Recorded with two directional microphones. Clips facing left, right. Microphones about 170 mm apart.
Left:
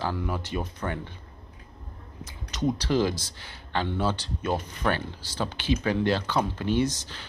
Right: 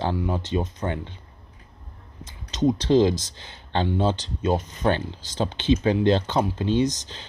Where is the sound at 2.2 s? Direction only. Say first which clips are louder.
Right 5 dB; 20° right (ahead or behind).